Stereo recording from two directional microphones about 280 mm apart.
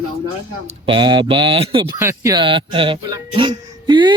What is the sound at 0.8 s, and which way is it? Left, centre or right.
Speech, centre.